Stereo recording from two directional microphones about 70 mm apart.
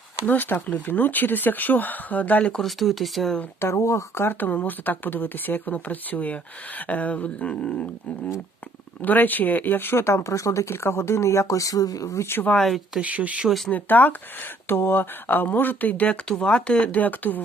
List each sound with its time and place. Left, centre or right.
0.3 s speech: left
2.5 s speech: centre
3.6 s speech: left; by 7.9 s centre
9.0 s speech: left
12.2 s speech: left
12.5 s speech: centre
13.0 s speech: right
13.7 s speech: left